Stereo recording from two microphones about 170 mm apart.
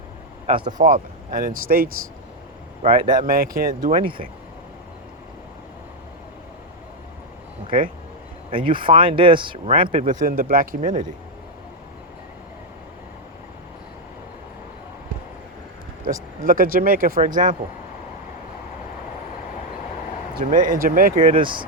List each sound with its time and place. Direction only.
0.4 s speech: 30° right (ahead or behind)
0.8 s speech: 50° right (ahead or behind)
2.8 s speech: 30° right (ahead or behind)
3.2 s speech: 60° right (ahead or behind)
8.4 s speech: 30° right (ahead or behind)
10.1 s speech: 55° right (ahead or behind)
16.4 s speech: 55° right (ahead or behind)
20.4 s speech: 50° right (ahead or behind)
21.3 s speech: 30° right (ahead or behind)